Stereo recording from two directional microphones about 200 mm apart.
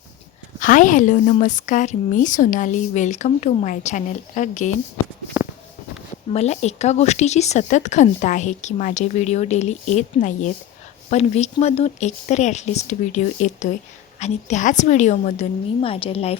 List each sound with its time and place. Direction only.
0.6 s speech: 40° left (ahead or behind)
5.4 s a sound: 10° right (ahead or behind)
6.3 s speech: 35° left (ahead or behind)